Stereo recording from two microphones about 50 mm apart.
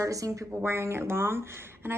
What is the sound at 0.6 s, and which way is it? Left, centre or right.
Speech, right.